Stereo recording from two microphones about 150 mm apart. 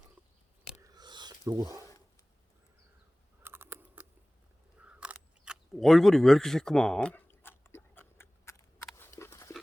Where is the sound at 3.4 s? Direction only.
15° right (ahead or behind).